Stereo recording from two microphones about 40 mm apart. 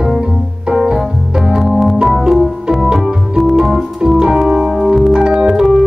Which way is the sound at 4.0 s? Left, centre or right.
Centre.